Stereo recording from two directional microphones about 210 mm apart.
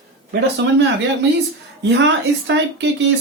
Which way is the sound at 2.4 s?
55° right (ahead or behind).